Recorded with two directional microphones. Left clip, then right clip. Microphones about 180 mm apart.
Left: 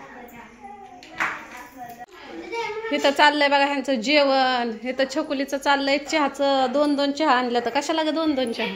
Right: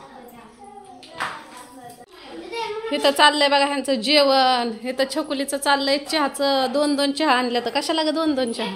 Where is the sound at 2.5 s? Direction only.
Centre (ahead or behind).